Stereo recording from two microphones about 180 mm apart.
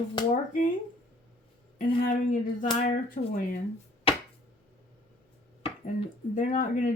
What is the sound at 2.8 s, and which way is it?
Speech, 45° left (ahead or behind).